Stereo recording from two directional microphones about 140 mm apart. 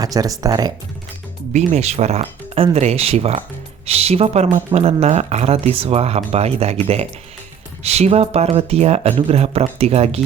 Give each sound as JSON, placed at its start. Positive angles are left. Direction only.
{"t": 0.0, "sound": "speech", "side_deg": -25}
{"t": 1.5, "sound": "speech", "side_deg": -50}